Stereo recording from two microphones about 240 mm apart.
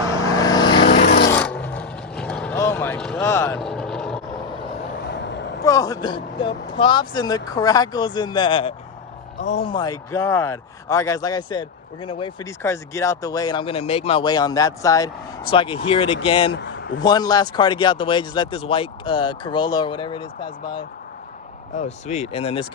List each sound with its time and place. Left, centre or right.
0.3 s vehicle: centre
1.0 s a sound: left
1.3 s vehicle: centre
5.0 s vehicle: left
5.6 s speech: centre
9.4 s speech: left
9.6 s speech: centre
16.6 s a sound: left
17.0 s speech: centre
21.8 s speech: left